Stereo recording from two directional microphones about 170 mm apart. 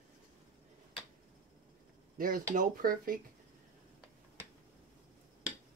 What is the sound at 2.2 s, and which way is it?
Speech, 55° right (ahead or behind).